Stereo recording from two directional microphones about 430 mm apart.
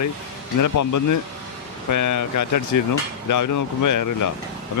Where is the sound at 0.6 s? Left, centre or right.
Left.